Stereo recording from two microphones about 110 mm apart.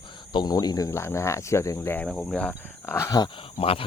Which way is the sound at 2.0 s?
5° left (ahead or behind).